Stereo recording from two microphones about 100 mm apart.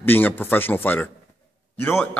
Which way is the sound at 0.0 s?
20° left (ahead or behind).